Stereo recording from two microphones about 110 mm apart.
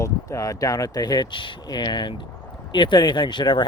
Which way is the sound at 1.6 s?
40° left (ahead or behind).